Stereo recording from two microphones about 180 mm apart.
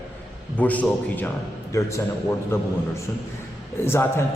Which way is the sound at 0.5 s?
10° left (ahead or behind).